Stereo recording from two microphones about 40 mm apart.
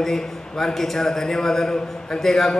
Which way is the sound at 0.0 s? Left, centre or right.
Centre.